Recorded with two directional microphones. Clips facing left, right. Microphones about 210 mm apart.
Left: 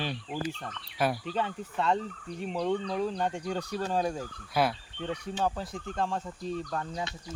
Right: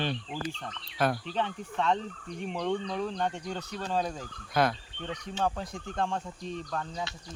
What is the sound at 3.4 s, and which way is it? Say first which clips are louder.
Speech: left 4 dB; 35° left (ahead or behind).